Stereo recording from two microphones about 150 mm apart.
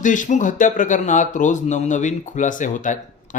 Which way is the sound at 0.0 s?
60° left (ahead or behind).